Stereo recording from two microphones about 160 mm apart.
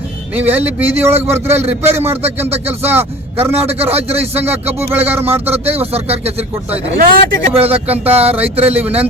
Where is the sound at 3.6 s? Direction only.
40° right (ahead or behind).